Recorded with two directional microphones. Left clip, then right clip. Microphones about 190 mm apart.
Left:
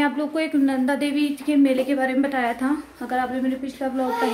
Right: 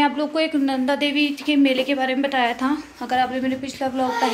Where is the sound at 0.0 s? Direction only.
15° left (ahead or behind).